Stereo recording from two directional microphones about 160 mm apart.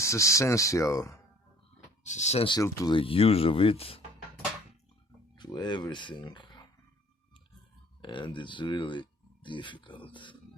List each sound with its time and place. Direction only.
0.0 s speech: 20° left (ahead or behind)
2.0 s speech: 45° left (ahead or behind)
2.5 s speech: 20° left (ahead or behind)
5.4 s speech: 25° left (ahead or behind)
8.0 s speech: 30° left (ahead or behind)